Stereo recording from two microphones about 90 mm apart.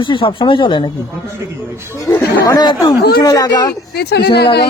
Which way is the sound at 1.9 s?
30° left (ahead or behind).